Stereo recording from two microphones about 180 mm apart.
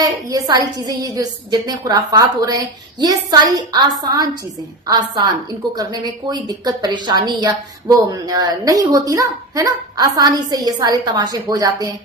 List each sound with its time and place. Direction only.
0.0 s a woman's voice: 20° right (ahead or behind)